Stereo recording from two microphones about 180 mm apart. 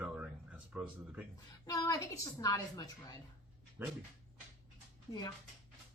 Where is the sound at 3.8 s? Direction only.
10° right (ahead or behind).